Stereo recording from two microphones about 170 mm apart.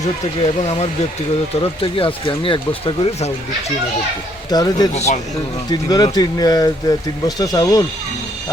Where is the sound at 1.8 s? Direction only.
30° left (ahead or behind).